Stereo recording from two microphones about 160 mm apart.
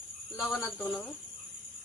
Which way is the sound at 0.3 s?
Centre (ahead or behind).